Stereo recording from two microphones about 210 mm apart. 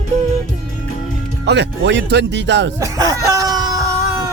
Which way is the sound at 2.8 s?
15° right (ahead or behind).